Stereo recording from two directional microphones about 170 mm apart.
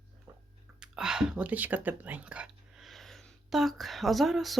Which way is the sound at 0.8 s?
5° right (ahead or behind).